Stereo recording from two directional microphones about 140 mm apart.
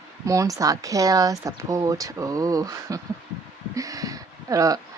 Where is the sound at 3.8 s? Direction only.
25° right (ahead or behind).